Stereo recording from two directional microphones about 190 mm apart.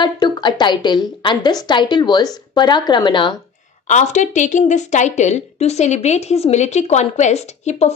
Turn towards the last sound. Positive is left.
turn(degrees=35)  # may be behind; listen again after turning